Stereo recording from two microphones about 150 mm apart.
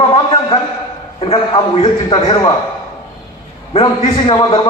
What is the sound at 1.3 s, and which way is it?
A man's voice, 40° left (ahead or behind).